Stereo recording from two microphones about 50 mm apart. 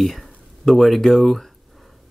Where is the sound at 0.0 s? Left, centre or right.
Centre.